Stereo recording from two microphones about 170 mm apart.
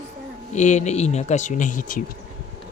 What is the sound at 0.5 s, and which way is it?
Speech, 45° left (ahead or behind).